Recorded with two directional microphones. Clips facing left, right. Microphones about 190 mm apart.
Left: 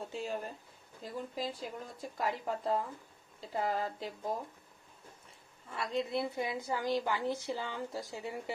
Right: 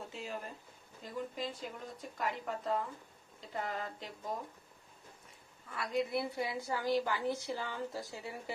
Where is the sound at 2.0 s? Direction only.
30° left (ahead or behind).